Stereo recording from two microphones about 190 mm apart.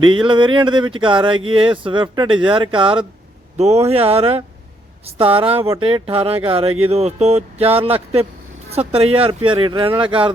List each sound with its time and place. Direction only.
0.0 s speech: 25° right (ahead or behind)
8.9 s speech: 30° right (ahead or behind)